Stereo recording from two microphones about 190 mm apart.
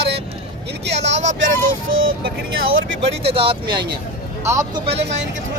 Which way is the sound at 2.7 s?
80° right.